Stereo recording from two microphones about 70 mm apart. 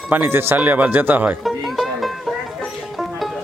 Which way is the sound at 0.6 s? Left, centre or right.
Right.